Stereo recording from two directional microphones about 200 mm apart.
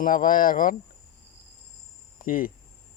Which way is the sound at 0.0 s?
45° left (ahead or behind).